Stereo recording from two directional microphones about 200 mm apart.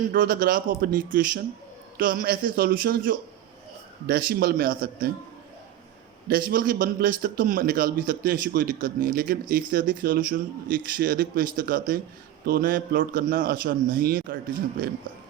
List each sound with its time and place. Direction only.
0.1 s a man's voice: 45° right (ahead or behind)
6.2 s a man's voice: 45° right (ahead or behind)